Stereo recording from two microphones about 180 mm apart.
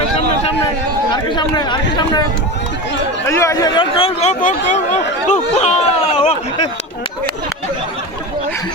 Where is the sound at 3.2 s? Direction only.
15° left (ahead or behind); by 5.7 s 40° left (ahead or behind).